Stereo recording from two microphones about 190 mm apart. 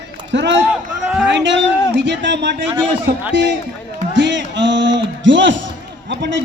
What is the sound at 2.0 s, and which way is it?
Speech, 65° right (ahead or behind).